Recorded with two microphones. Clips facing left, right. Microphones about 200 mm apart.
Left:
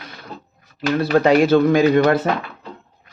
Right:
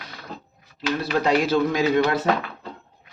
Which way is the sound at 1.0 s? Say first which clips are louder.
Left 7 dB; 55° left (ahead or behind).